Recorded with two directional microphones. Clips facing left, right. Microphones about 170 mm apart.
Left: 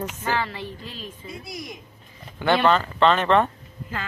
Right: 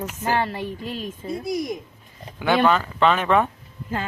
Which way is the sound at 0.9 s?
45° right (ahead or behind).